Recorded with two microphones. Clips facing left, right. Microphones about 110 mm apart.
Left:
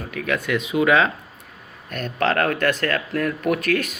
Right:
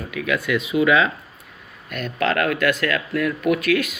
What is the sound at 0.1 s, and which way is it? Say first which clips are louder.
Speech: right 1 dB; 40° left (ahead or behind).